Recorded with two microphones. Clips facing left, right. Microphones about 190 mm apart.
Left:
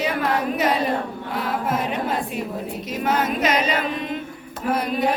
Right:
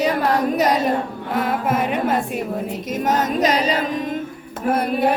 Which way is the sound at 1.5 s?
55° right (ahead or behind).